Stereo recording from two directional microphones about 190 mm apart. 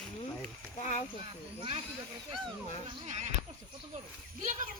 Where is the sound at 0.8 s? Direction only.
40° left (ahead or behind).